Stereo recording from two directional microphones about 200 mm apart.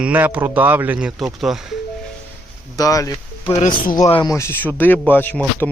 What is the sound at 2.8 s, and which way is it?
Speech, 15° left (ahead or behind).